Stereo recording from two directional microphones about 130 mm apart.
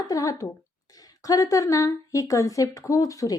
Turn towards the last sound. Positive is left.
turn(degrees=25)  # may be behind; listen again after turning